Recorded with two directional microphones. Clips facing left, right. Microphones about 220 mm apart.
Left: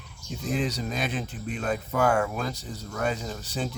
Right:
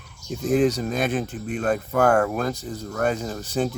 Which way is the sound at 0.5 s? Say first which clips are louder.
Right 9 dB; 50° right (ahead or behind).